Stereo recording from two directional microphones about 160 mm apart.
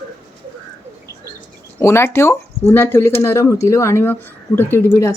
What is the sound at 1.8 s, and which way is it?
Speech, 15° left (ahead or behind).